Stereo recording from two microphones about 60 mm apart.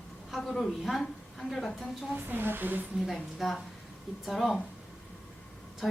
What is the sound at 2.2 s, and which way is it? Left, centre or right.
Speech, right.